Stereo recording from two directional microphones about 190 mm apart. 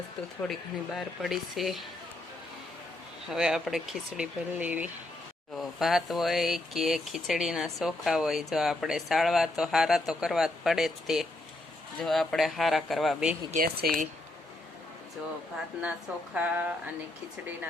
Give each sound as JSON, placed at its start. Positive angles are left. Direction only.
{"t": 0.4, "sound": "speech", "side_deg": 0}
{"t": 3.2, "sound": "speech", "side_deg": -5}
{"t": 13.5, "sound": "speech", "side_deg": -45}
{"t": 16.3, "sound": "speech", "side_deg": -5}